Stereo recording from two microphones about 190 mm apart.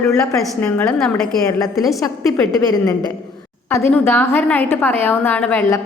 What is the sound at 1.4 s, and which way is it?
A woman's voice, 20° left (ahead or behind).